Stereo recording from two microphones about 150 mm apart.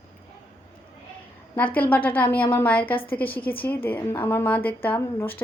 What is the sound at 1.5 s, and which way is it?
A woman's voice, 10° left (ahead or behind).